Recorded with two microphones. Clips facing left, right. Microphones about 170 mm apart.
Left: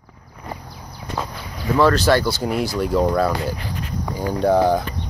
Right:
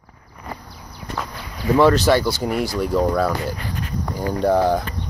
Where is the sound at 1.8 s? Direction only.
15° right (ahead or behind).